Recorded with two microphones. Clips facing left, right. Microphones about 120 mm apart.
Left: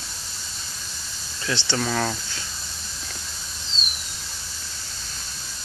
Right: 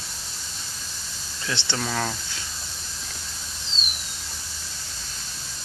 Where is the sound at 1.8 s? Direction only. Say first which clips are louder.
Left 3 dB; 5° right (ahead or behind).